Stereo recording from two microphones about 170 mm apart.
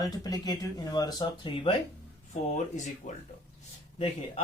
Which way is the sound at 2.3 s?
45° left (ahead or behind).